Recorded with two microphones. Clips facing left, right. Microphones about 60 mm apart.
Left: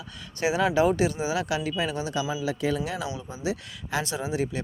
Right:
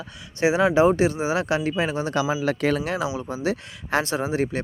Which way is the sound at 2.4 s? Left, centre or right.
Right.